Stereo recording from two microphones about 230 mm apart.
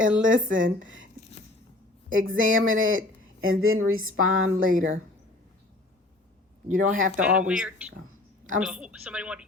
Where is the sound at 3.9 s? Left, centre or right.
Right.